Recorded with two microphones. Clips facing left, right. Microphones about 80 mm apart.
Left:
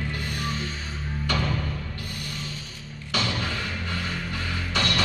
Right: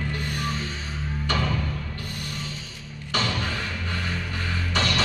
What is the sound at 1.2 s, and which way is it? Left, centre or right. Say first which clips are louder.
Music: right 1 dB; right.